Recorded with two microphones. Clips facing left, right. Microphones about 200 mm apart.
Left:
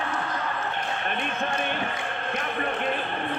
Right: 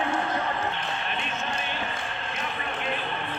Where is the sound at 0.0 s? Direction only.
25° right (ahead or behind).